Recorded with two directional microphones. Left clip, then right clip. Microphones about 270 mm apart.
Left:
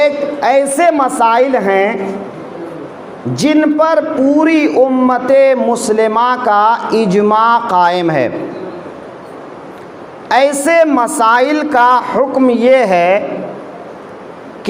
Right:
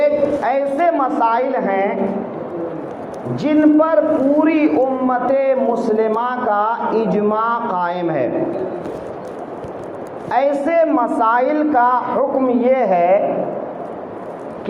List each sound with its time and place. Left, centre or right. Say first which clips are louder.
0.0 s a man's voice: left 3 dB; left
3.3 s a man's voice: left 2 dB; left
10.2 s a man's voice: left 6 dB; left